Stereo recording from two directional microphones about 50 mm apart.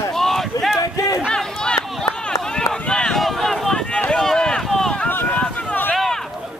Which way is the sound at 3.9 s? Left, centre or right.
Centre.